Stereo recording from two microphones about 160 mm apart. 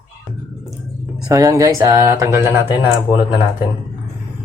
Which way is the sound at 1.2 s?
20° right (ahead or behind).